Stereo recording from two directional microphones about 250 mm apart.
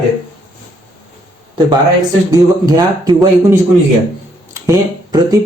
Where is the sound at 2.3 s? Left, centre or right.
Centre.